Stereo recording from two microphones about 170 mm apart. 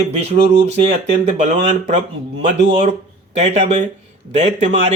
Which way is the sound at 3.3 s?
40° right (ahead or behind).